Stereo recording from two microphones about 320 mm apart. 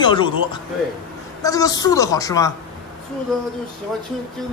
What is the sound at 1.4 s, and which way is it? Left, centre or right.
A man's voice, centre.